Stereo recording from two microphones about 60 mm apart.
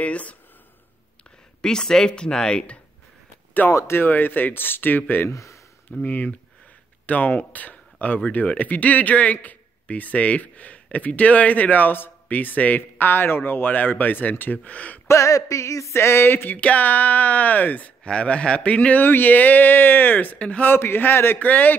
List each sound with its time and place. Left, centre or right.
0.0 s speech: left
1.6 s speech: centre
3.7 s speech: left
5.3 s speech: left
6.0 s speech: left
15.0 s a sound: left
16.5 s speech: left
20.7 s speech: left
21.5 s speech: left